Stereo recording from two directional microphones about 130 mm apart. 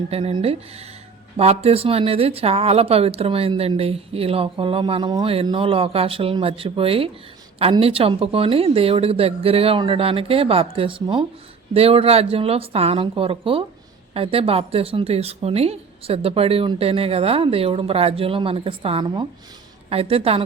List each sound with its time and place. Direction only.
0.1 s speech: 45° right (ahead or behind)